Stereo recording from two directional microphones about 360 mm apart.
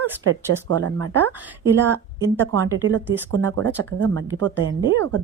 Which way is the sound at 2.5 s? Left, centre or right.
Right.